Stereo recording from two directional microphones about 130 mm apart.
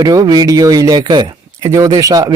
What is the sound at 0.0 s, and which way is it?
Speech, 30° right (ahead or behind).